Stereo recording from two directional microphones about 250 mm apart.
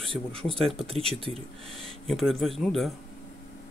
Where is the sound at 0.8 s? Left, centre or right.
Right.